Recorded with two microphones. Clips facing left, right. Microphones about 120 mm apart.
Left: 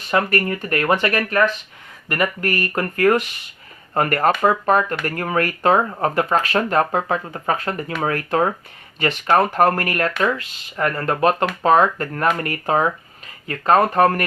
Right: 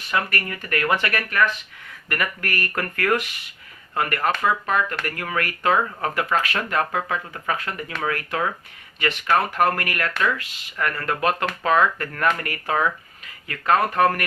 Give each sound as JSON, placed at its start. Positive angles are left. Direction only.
{"t": 0.1, "sound": "speech", "side_deg": 30}
{"t": 3.9, "sound": "speech", "side_deg": 40}